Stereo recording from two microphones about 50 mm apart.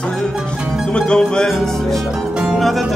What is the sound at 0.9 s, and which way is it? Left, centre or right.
Music, centre.